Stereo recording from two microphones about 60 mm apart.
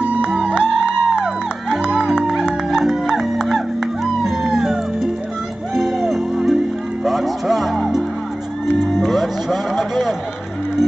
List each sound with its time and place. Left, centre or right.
0.0 s music: centre